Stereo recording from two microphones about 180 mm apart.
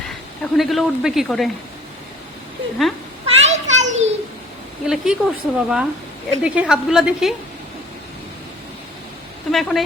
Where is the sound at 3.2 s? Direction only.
40° right (ahead or behind).